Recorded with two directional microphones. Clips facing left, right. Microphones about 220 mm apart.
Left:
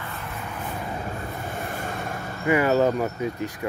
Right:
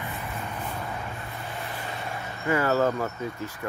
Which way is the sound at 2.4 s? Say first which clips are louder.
Left 4 dB; 15° left (ahead or behind).